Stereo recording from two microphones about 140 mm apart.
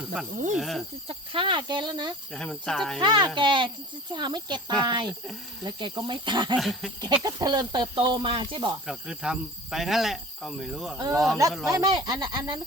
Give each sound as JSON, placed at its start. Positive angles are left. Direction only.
{"t": 0.5, "sound": "speech", "side_deg": 0}
{"t": 1.0, "sound": "speech", "side_deg": -40}
{"t": 2.3, "sound": "speech", "side_deg": 5}
{"t": 3.0, "sound": "speech", "side_deg": -35}
{"t": 6.6, "sound": "speech", "side_deg": 0}
{"t": 7.0, "sound": "speech", "side_deg": -25}
{"t": 8.9, "sound": "speech", "side_deg": -5}
{"t": 10.9, "sound": "speech", "side_deg": -25}